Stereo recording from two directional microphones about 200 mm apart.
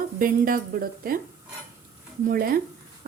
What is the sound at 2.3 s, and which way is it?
Speech, 50° right (ahead or behind).